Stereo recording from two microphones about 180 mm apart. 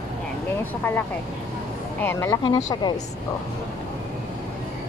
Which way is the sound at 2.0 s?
15° left (ahead or behind).